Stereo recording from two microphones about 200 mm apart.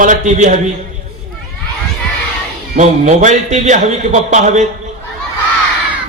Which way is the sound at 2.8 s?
35° right (ahead or behind).